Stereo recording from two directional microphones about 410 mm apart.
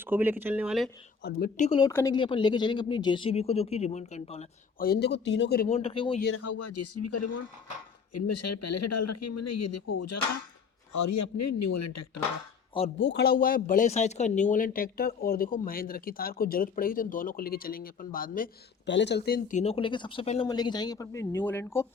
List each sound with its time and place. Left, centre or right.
0.0 s speech: centre
1.2 s speech: centre
6.2 s speech: left
13.0 s speech: left; by 21.8 s centre